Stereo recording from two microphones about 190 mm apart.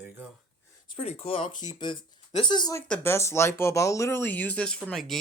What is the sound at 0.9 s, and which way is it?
Speech, 30° left (ahead or behind).